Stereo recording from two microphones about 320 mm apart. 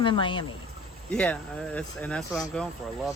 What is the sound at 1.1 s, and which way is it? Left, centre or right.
Speech, centre.